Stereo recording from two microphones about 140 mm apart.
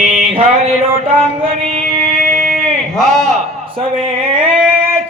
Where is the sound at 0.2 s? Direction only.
50° right (ahead or behind).